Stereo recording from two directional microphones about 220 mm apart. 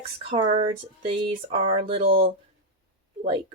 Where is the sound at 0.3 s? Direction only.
25° right (ahead or behind).